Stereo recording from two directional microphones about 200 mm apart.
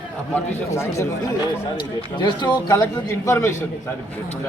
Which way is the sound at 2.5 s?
20° left (ahead or behind).